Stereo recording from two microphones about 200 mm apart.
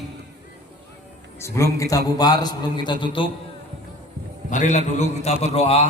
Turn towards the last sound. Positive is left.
turn(degrees=30)  # may be behind; listen again after turning